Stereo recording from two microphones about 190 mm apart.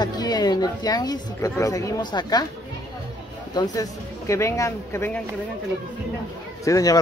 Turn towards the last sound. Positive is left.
turn(degrees=20)  # may be behind; listen again after turning